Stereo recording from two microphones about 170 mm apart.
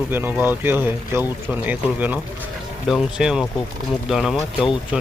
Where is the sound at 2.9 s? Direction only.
Centre (ahead or behind).